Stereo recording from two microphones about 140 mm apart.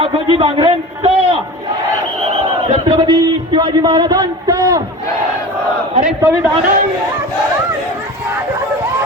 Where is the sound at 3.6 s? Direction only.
30° right (ahead or behind).